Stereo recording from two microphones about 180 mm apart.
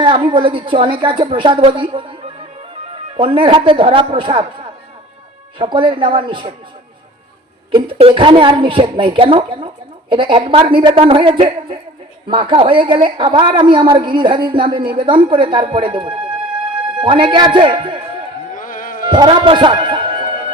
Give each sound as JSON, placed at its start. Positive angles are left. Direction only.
{"t": 0.0, "sound": "a woman's voice", "side_deg": -25}
{"t": 3.2, "sound": "a woman's voice", "side_deg": -30}
{"t": 7.7, "sound": "a woman's voice", "side_deg": -30}
{"t": 18.5, "sound": "music", "side_deg": 50}
{"t": 19.1, "sound": "a man's voice", "side_deg": -25}